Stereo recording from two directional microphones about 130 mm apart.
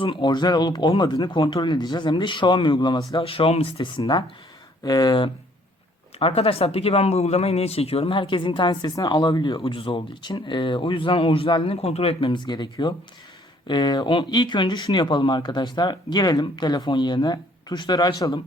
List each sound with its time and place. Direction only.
0.0 s speech: 40° left (ahead or behind)
4.8 s speech: 30° left (ahead or behind)
6.1 s speech: 50° left (ahead or behind); by 18.3 s 30° left (ahead or behind)